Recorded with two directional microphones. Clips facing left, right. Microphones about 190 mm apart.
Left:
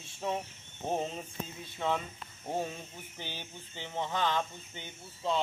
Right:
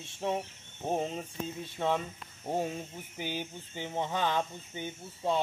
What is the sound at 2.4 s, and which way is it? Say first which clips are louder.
Speech: right 3 dB; 15° right (ahead or behind).